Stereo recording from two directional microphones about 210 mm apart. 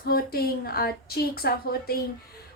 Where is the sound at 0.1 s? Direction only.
45° left (ahead or behind).